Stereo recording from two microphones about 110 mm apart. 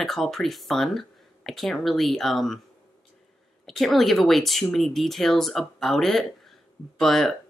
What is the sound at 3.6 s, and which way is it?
Speech, centre (ahead or behind).